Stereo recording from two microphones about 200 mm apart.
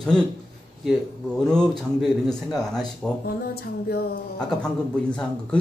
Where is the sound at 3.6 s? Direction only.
50° left (ahead or behind).